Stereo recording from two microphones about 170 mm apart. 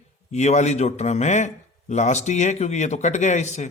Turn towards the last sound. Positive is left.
turn(degrees=45)  # may be behind; listen again after turning